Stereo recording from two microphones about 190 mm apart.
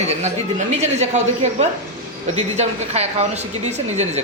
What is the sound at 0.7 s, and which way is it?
A woman's voice, 35° right (ahead or behind).